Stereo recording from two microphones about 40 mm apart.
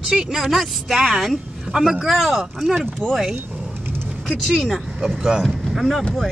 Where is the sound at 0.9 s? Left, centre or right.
Centre.